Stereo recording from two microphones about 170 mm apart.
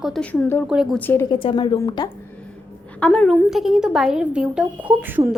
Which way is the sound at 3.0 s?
5° left (ahead or behind).